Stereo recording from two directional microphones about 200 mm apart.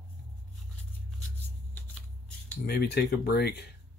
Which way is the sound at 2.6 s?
55° left (ahead or behind).